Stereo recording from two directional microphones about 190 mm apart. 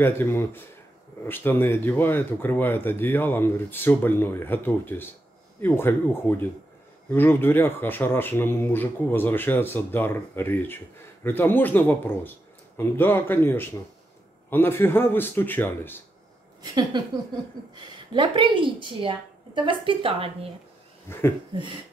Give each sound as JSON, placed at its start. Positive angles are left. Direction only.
{"t": 0.0, "sound": "speech", "side_deg": 10}
{"t": 17.7, "sound": "a woman's voice", "side_deg": -25}
{"t": 21.1, "sound": "speech", "side_deg": 15}